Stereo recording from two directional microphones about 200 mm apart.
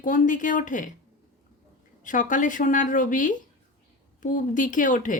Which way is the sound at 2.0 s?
40° left (ahead or behind).